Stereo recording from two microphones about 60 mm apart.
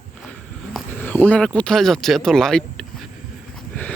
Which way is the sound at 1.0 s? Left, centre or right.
Left.